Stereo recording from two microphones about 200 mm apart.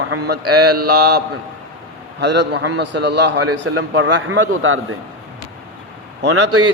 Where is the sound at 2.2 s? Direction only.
60° right (ahead or behind); by 4.7 s 75° right (ahead or behind).